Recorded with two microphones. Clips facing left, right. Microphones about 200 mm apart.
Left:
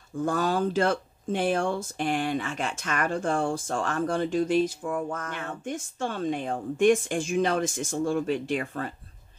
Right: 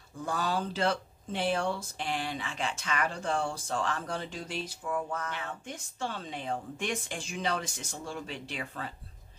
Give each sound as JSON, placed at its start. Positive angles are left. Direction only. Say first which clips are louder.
{"t": 0.2, "sound": "speech", "louder": "left 7 dB", "side_deg": 50}